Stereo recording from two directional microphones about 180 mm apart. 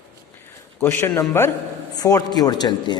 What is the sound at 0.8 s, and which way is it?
A man's voice, 15° left (ahead or behind).